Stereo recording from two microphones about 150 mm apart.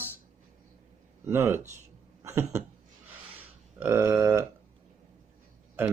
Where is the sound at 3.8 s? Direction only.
15° right (ahead or behind).